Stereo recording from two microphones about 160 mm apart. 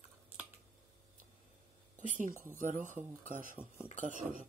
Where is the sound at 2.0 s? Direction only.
50° right (ahead or behind).